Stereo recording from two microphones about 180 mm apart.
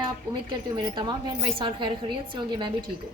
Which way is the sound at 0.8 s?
25° right (ahead or behind).